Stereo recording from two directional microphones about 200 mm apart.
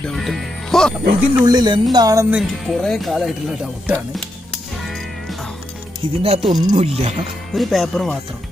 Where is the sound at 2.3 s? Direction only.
Centre (ahead or behind).